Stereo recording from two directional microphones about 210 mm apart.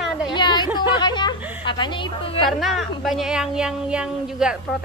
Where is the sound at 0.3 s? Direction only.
20° left (ahead or behind).